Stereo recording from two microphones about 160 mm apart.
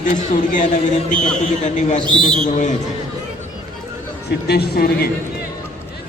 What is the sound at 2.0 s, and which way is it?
Speech, 30° right (ahead or behind).